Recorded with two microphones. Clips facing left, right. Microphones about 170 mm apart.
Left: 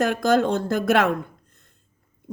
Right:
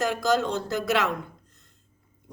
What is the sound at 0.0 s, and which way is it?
Speech, 55° left (ahead or behind).